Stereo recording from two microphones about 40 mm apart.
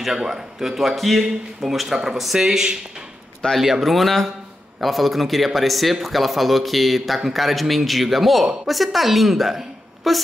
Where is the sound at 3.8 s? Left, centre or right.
Centre.